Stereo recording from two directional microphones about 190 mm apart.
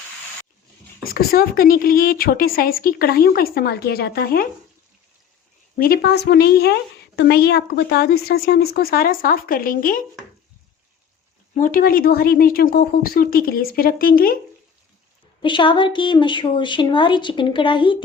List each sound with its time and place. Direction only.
1.0 s a woman's voice: 50° left (ahead or behind)
5.7 s a woman's voice: 50° left (ahead or behind)
11.5 s a woman's voice: 45° left (ahead or behind)
15.4 s speech: 25° left (ahead or behind)